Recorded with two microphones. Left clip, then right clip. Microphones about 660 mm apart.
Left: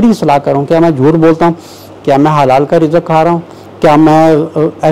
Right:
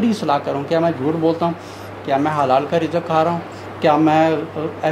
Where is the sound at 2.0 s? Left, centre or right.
Left.